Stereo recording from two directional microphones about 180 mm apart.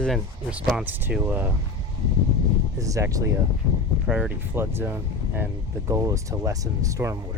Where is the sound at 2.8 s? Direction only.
15° right (ahead or behind).